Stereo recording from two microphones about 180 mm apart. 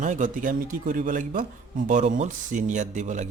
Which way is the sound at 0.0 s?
45° right (ahead or behind).